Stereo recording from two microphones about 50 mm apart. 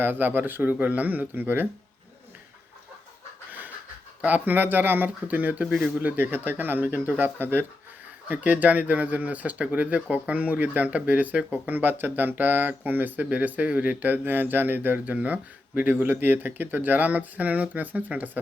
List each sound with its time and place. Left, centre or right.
0.0 s speech: right
4.3 s speech: right
8.3 s speech: right
11.6 s speech: right